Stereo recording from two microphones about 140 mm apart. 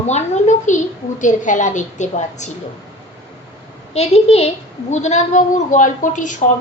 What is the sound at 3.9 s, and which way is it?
A woman's voice, 45° left (ahead or behind).